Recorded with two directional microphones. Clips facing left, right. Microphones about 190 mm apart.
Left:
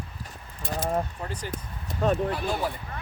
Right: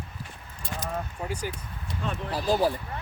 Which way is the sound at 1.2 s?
10° right (ahead or behind).